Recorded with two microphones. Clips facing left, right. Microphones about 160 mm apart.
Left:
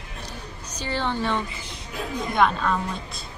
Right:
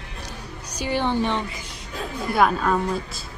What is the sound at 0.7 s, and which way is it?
Speech, 15° right (ahead or behind).